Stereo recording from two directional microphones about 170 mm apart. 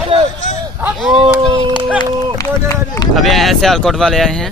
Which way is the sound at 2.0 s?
20° left (ahead or behind).